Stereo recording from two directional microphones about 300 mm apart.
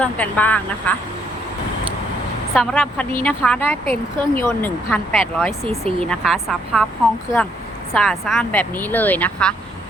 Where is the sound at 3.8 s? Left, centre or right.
Centre.